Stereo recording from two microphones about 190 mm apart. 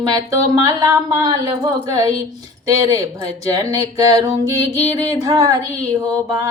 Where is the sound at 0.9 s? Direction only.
20° right (ahead or behind).